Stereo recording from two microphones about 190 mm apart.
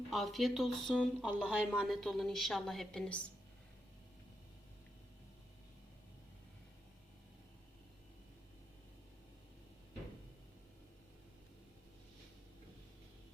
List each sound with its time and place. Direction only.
0.1 s speech: centre (ahead or behind)